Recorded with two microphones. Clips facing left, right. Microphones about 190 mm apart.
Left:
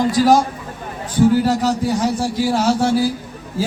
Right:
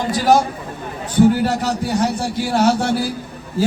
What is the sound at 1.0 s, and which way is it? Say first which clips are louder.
A man's voice: even; 65° right (ahead or behind).